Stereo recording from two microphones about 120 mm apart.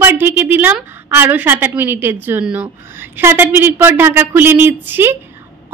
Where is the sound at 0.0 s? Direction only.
15° right (ahead or behind).